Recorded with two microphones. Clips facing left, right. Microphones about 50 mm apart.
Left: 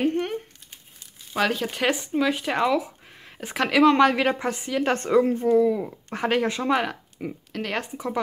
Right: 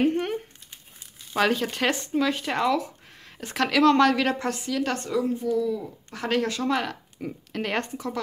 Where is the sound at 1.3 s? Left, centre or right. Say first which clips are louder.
Right 1 dB; centre; by 4.9 s left.